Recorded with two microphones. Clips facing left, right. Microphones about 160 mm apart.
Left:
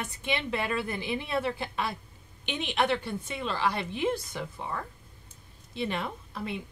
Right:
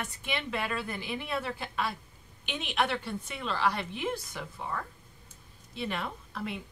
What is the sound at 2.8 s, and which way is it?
Speech, 20° left (ahead or behind).